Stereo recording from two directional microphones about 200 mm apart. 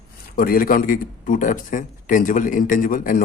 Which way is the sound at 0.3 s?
45° left (ahead or behind).